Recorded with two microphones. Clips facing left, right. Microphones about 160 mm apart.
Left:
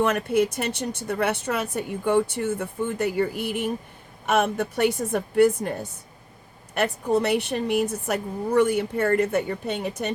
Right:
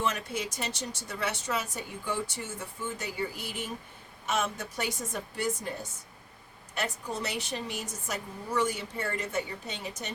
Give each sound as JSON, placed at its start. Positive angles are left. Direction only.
{"t": 0.0, "sound": "a woman's voice", "side_deg": 60}
{"t": 6.7, "sound": "a woman's voice", "side_deg": 60}